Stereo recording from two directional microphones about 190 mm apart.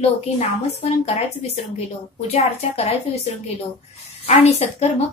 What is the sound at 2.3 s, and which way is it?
Speech, 30° left (ahead or behind).